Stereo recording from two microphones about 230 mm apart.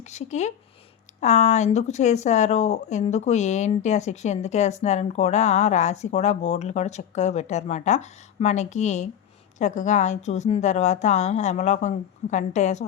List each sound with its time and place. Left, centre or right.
0.0 s a woman's voice: left